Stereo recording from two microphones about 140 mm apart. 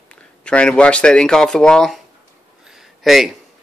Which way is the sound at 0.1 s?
10° left (ahead or behind).